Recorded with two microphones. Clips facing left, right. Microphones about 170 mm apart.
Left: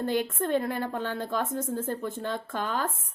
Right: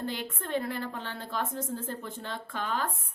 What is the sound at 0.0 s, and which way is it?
A woman's voice, 50° left (ahead or behind).